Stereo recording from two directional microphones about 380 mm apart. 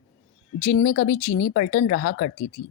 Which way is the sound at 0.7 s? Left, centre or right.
Left.